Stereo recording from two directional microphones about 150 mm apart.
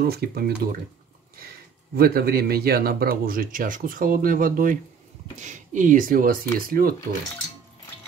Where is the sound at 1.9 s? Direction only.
90° right; by 4.8 s 65° right (ahead or behind).